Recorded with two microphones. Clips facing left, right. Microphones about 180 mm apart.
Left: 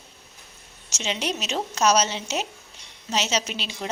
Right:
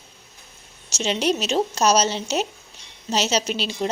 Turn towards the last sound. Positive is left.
turn(degrees=-35)  # may be behind; listen again after turning